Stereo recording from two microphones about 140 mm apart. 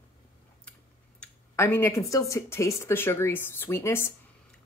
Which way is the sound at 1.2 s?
15° left (ahead or behind).